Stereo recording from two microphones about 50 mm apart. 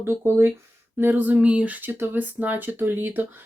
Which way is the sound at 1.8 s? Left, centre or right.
Right.